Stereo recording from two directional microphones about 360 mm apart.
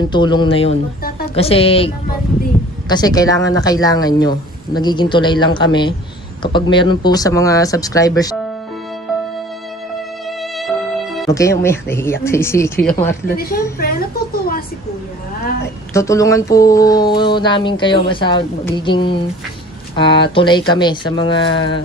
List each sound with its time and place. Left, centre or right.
0.1 s speech: centre
11.1 s speech: centre
13.3 s a woman's voice: left
15.9 s speech: centre